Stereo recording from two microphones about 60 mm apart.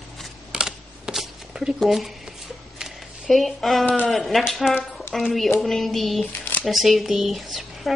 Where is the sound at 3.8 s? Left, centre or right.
Left.